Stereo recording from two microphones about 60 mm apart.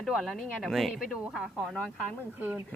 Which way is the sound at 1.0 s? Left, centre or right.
Centre.